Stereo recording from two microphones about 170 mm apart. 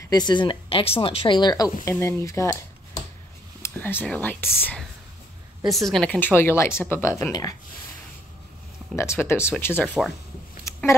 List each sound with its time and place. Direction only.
0.1 s speech: 25° left (ahead or behind)
5.9 s speech: 5° left (ahead or behind)
8.9 s speech: 15° left (ahead or behind)
10.6 s a sound: 15° left (ahead or behind)